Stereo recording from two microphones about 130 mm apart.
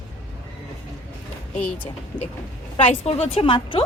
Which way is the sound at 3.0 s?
50° left (ahead or behind).